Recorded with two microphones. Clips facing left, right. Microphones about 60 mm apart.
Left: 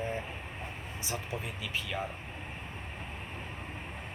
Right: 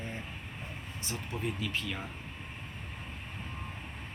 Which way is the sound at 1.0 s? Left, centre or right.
Centre.